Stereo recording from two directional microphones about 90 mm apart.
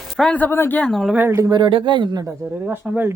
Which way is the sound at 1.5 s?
65° right (ahead or behind).